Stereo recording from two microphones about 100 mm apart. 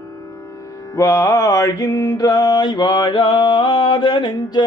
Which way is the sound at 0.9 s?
30° left (ahead or behind).